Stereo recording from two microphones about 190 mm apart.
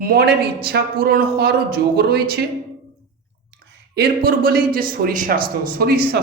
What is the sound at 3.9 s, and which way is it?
A man's voice, 55° right (ahead or behind).